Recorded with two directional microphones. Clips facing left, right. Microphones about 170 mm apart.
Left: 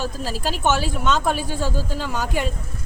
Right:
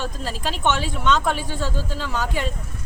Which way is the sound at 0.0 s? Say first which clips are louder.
Left 2 dB; 5° left (ahead or behind).